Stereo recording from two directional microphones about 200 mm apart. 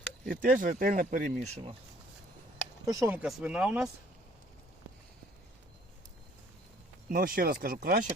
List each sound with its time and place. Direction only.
0.3 s speech: 40° right (ahead or behind)
2.8 s speech: 15° right (ahead or behind)
7.1 s speech: 50° right (ahead or behind)